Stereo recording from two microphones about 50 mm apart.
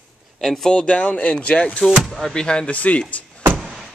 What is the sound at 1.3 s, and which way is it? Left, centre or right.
Speech, centre.